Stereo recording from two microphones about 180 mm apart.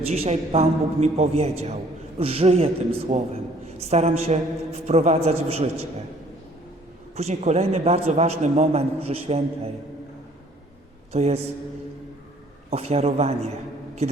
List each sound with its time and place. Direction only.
0.1 s a man's voice: 35° right (ahead or behind)
7.2 s a man's voice: 35° right (ahead or behind)
11.1 s a man's voice: 35° right (ahead or behind)
12.7 s a man's voice: 35° right (ahead or behind)
14.0 s a sound: 35° right (ahead or behind)